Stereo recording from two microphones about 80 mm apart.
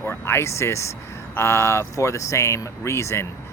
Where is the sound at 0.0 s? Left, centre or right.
Left.